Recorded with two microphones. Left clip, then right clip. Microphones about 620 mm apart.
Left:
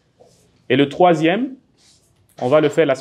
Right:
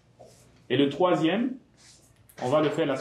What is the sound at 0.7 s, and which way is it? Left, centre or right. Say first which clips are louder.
Speech: left 9 dB; left.